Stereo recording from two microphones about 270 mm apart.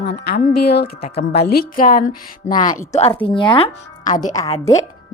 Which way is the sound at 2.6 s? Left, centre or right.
Centre.